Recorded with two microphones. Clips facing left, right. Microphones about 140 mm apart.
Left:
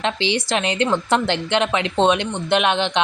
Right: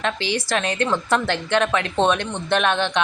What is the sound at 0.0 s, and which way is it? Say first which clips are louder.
A woman's voice: left 2 dB; 20° left (ahead or behind).